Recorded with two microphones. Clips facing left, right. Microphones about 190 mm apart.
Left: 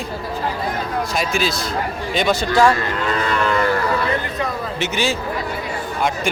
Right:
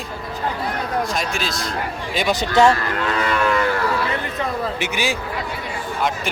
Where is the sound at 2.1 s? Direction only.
15° right (ahead or behind).